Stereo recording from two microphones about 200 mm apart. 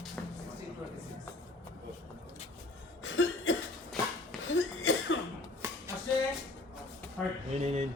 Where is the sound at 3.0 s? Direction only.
70° left (ahead or behind).